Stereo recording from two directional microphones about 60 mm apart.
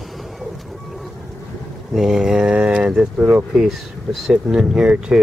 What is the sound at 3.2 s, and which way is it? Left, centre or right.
Speech, right.